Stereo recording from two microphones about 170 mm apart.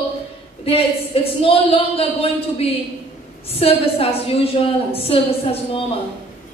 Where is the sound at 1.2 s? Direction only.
35° left (ahead or behind).